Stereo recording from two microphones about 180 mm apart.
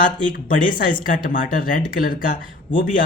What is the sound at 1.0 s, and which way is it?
Speech, 50° left (ahead or behind).